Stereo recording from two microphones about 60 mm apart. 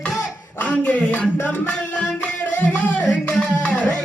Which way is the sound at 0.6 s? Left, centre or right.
Left.